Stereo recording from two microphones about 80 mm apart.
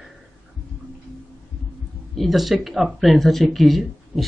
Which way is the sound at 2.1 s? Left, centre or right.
Centre.